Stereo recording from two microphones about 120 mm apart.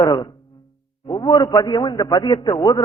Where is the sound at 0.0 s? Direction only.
35° left (ahead or behind).